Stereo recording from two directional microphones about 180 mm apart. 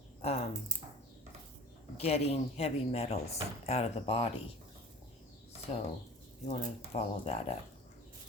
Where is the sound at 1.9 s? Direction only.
35° left (ahead or behind).